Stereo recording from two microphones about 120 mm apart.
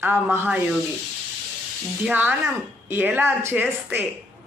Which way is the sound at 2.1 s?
15° right (ahead or behind).